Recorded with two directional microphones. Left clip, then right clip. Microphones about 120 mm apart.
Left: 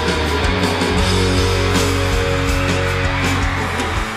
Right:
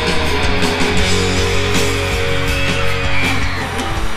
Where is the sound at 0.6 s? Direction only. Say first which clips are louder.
Right 1 dB; 10° right (ahead or behind).